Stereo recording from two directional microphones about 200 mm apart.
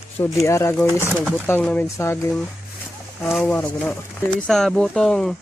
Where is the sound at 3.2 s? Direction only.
5° left (ahead or behind).